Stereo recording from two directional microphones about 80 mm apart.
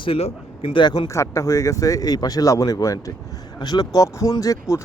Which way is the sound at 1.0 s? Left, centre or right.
Left.